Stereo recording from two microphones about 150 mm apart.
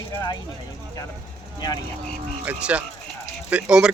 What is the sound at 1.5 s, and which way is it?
Speech, 25° left (ahead or behind).